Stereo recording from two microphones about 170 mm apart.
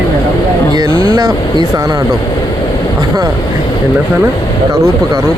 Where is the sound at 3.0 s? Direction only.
20° right (ahead or behind).